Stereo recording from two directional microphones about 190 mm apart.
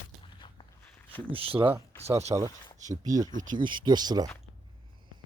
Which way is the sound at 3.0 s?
20° right (ahead or behind).